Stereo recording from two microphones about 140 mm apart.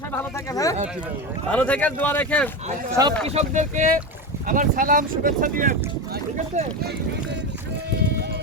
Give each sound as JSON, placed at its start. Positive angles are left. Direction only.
{"t": 0.2, "sound": "speech", "side_deg": 20}
{"t": 1.5, "sound": "speech", "side_deg": 10}
{"t": 2.9, "sound": "speech", "side_deg": -25}
{"t": 3.2, "sound": "speech", "side_deg": -55}